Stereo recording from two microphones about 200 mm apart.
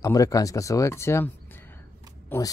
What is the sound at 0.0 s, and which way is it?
Speech, 15° left (ahead or behind).